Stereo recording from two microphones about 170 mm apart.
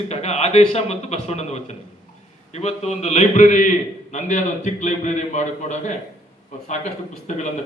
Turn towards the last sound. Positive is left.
turn(degrees=45)  # may be behind; listen again after turning